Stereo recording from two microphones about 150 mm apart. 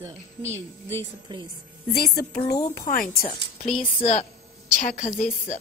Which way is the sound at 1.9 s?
90° left.